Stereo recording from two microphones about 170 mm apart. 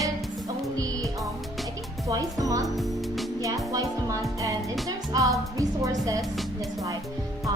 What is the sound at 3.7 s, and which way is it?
Music, 20° right (ahead or behind).